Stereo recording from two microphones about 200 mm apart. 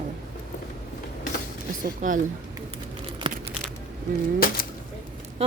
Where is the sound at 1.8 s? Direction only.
40° right (ahead or behind).